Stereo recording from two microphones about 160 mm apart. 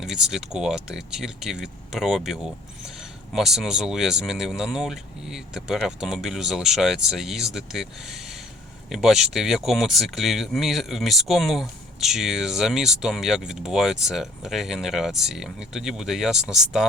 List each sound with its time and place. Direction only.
0.0 s speech: 5° right (ahead or behind)